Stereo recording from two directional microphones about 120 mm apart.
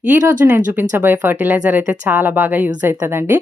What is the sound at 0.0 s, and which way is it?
A woman's voice, 15° right (ahead or behind).